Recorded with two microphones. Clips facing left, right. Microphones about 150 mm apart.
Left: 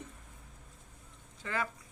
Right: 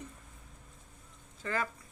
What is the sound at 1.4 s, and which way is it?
Speech, 10° left (ahead or behind).